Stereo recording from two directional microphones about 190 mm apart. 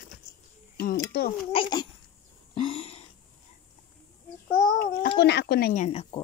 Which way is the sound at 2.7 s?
30° left (ahead or behind).